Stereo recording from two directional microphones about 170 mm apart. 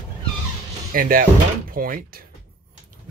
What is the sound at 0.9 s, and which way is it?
Speech, 55° right (ahead or behind).